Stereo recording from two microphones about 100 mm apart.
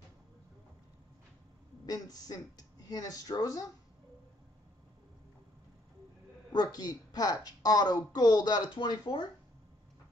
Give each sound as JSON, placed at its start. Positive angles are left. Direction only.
{"t": 1.9, "sound": "a woman's voice", "side_deg": 40}
{"t": 6.5, "sound": "a woman's voice", "side_deg": 40}
{"t": 8.7, "sound": "speech", "side_deg": 55}